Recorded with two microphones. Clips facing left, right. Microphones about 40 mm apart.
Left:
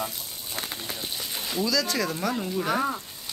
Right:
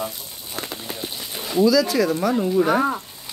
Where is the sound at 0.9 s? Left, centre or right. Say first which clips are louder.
Right 2 dB; centre.